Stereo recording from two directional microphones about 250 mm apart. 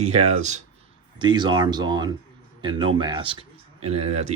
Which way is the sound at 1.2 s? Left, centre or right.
Centre.